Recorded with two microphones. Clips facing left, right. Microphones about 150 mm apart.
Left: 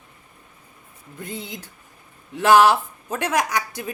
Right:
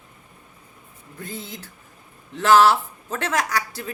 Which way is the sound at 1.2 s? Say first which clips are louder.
Left 2 dB; 20° left (ahead or behind).